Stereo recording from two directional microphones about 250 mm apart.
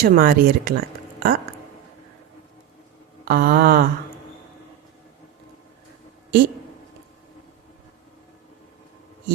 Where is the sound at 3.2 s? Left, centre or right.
Right.